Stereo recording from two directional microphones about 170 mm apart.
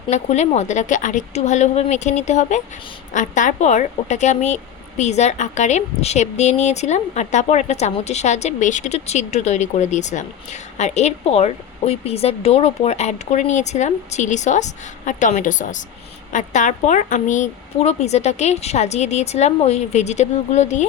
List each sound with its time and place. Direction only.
0.1 s a woman's voice: 40° left (ahead or behind)